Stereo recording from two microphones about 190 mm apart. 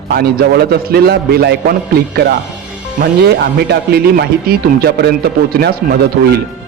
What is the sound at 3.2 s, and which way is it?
Speech, 60° right (ahead or behind).